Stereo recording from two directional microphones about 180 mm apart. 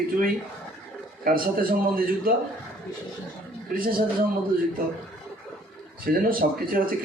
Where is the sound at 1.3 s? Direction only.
55° right (ahead or behind).